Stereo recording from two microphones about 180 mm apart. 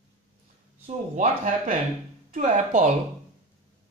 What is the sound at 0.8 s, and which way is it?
Speech, 40° right (ahead or behind).